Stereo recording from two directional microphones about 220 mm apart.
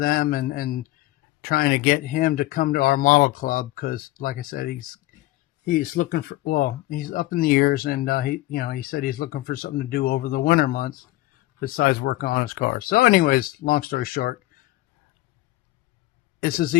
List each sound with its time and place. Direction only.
0.0 s speech: 40° left (ahead or behind)
16.4 s speech: 40° left (ahead or behind)